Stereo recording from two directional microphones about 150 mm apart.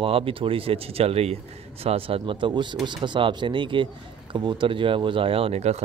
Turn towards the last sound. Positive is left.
turn(degrees=-45)  # may be behind; listen again after turning